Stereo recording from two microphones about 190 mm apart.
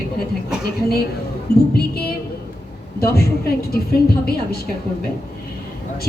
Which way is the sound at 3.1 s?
55° left (ahead or behind).